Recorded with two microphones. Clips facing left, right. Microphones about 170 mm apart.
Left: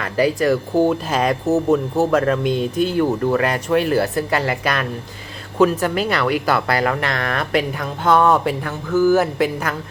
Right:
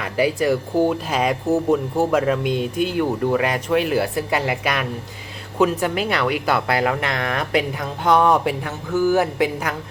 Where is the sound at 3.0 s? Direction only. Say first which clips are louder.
Left 1 dB; 10° right (ahead or behind).